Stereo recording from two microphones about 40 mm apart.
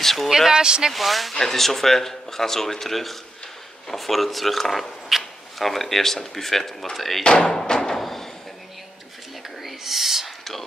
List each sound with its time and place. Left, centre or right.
0.0 s speech: centre
0.5 s speech: centre
0.9 s speech: centre
7.2 s a sound: centre
8.0 s a sound: centre
9.6 s whispering: centre